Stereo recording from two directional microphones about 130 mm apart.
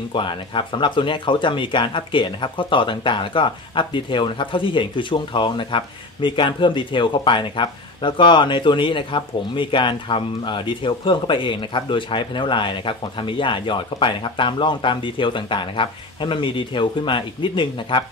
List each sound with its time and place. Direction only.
0.1 s speech: 40° left (ahead or behind)